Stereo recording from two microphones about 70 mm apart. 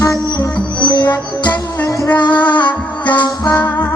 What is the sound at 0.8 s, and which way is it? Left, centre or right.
Music, left.